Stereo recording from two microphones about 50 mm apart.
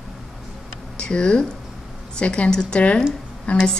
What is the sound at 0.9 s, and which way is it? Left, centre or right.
A woman's voice, centre.